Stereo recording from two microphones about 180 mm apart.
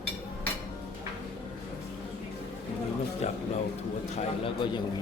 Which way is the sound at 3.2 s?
40° left (ahead or behind).